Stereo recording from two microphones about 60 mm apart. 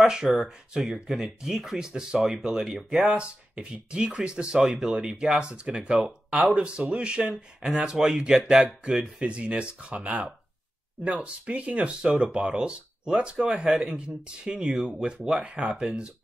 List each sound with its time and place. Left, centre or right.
0.0 s speech: centre
3.1 s speech: centre
9.2 s speech: centre